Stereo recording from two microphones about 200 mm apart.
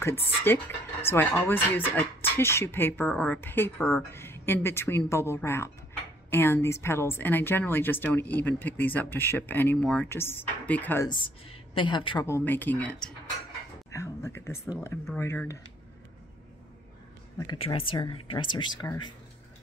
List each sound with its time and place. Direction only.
0.0 s speech: 10° left (ahead or behind)
11.1 s a woman's voice: 25° left (ahead or behind)
12.3 s speech: 10° left (ahead or behind)
17.5 s a woman's voice: 25° left (ahead or behind)